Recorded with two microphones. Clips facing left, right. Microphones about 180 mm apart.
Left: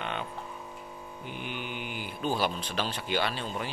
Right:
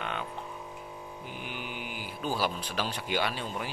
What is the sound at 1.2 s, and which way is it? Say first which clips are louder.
Speech: left 3 dB; 5° right (ahead or behind).